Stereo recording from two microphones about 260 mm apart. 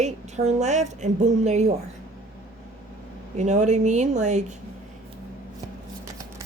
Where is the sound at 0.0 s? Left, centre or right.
Right.